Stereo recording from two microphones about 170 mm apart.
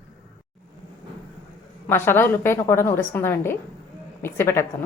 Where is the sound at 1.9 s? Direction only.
15° left (ahead or behind).